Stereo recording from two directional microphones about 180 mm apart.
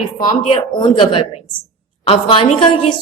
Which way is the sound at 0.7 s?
25° left (ahead or behind).